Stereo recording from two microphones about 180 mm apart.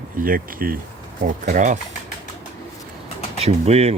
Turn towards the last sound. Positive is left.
turn(degrees=-35)  # may be behind; listen again after turning